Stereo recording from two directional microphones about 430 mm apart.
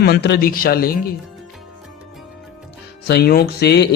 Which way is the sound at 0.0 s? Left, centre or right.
Left.